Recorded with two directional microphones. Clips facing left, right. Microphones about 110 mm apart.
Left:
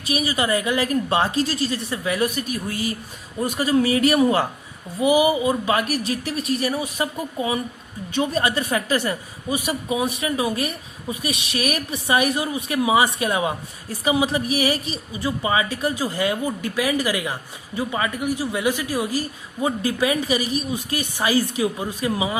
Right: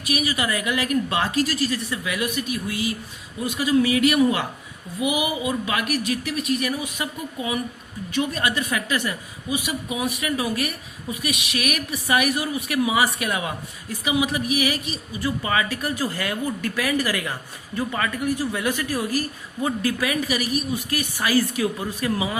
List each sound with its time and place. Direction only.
0.0 s a woman's voice: 30° left (ahead or behind)
15.2 s a woman's voice: 20° left (ahead or behind)